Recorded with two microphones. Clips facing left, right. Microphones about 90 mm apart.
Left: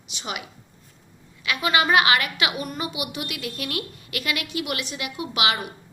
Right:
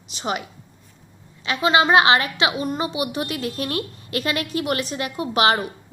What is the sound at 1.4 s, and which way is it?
A woman's voice, 25° right (ahead or behind).